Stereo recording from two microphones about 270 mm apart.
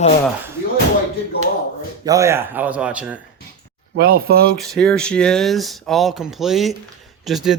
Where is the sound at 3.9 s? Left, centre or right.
Right.